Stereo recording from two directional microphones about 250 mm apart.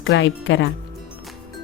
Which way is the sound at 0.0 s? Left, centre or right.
Left.